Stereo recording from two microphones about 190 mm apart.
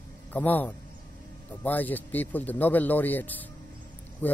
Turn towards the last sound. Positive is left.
turn(degrees=10)  # may be behind; listen again after turning